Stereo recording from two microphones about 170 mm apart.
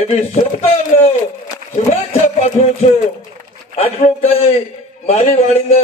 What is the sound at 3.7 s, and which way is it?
A man's voice, 35° left (ahead or behind).